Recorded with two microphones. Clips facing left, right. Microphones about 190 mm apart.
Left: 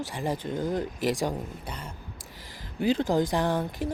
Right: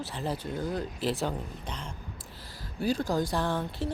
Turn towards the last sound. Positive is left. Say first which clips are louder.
# left 3 dB
turn(degrees=15)  # may be behind; listen again after turning